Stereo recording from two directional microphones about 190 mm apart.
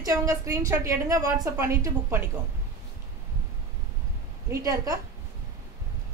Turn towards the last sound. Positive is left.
turn(degrees=-15)  # may be behind; listen again after turning